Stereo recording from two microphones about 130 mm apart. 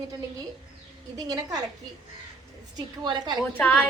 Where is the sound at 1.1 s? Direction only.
25° right (ahead or behind).